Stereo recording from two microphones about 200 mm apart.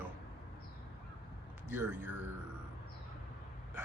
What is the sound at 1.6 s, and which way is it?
Speech, 10° right (ahead or behind).